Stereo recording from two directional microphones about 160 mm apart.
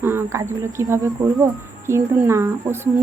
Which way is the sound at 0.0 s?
15° right (ahead or behind).